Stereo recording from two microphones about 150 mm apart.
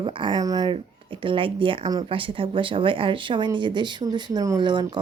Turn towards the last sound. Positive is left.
turn(degrees=-30)  # may be behind; listen again after turning